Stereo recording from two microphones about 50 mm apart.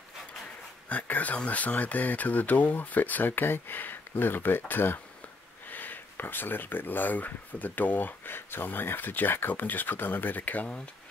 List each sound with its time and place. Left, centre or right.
0.8 s speech: left